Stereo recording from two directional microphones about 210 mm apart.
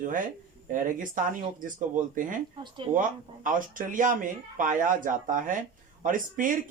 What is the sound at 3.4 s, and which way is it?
Speech, 40° right (ahead or behind).